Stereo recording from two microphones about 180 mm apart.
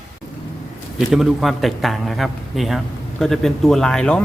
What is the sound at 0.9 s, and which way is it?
A man's voice, centre (ahead or behind).